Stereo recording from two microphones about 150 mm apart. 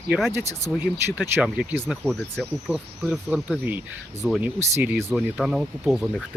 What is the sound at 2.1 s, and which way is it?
Speech, 5° left (ahead or behind).